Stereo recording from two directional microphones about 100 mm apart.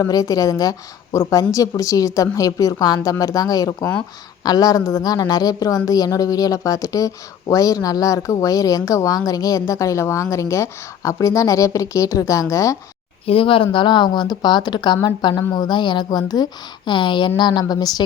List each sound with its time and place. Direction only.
0.0 s a woman's voice: 35° left (ahead or behind)
13.2 s a woman's voice: 65° left (ahead or behind); by 18.0 s 40° left (ahead or behind)